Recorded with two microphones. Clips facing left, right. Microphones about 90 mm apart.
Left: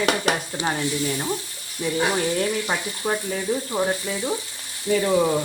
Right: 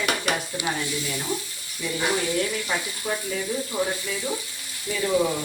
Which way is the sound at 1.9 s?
30° left (ahead or behind).